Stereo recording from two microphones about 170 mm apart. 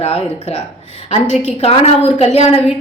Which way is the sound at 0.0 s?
35° left (ahead or behind).